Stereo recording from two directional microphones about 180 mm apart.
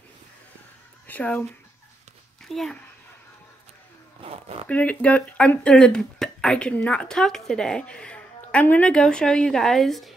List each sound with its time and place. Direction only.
1.0 s speech: 10° left (ahead or behind)
4.2 s zipper: 30° right (ahead or behind)
4.6 s speech: 5° left (ahead or behind)